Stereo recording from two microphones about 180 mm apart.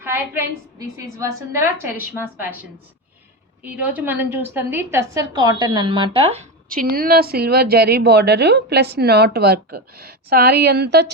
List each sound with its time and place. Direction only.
0.0 s a woman's voice: 15° right (ahead or behind)
3.6 s a woman's voice: 10° right (ahead or behind); by 6.5 s 35° right (ahead or behind)
6.7 s a woman's voice: 55° right (ahead or behind); by 11.1 s 70° right (ahead or behind)